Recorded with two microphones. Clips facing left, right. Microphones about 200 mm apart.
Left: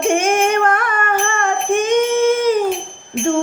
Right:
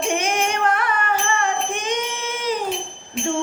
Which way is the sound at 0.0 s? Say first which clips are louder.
Left 7 dB; 50° left (ahead or behind).